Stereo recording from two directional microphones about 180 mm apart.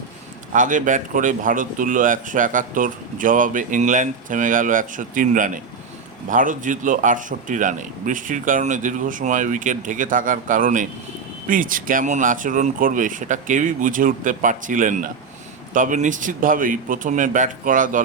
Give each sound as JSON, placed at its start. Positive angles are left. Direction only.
{"t": 0.5, "sound": "speech", "side_deg": -45}